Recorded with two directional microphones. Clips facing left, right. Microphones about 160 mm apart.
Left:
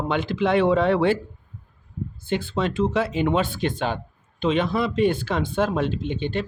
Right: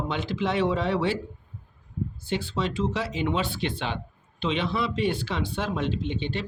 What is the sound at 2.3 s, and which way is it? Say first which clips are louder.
Speech: left 5 dB; 55° left (ahead or behind).